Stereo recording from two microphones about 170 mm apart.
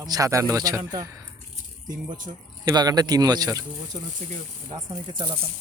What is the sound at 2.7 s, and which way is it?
Speech, 25° right (ahead or behind).